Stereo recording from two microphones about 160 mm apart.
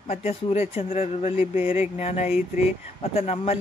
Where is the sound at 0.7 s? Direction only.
40° left (ahead or behind).